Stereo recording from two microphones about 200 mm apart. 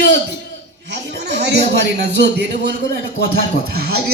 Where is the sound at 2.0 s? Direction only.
55° right (ahead or behind).